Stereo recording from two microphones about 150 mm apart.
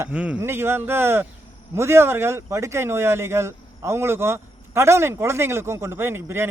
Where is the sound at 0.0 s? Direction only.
10° right (ahead or behind).